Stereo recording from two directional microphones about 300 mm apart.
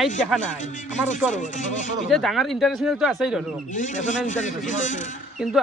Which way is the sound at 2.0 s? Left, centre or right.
Centre.